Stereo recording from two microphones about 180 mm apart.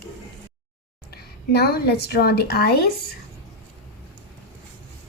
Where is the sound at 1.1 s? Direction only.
60° left (ahead or behind).